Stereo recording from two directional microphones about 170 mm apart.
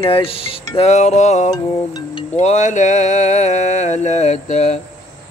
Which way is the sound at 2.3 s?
45° left (ahead or behind).